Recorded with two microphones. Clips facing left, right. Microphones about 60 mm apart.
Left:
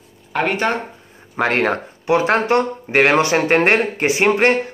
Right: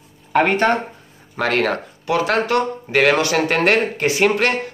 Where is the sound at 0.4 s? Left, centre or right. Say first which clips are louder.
Right 3 dB; centre.